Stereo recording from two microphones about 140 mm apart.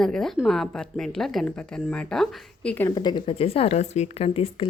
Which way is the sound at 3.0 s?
30° left (ahead or behind).